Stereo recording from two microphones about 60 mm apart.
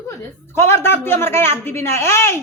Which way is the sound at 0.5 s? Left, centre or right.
Left.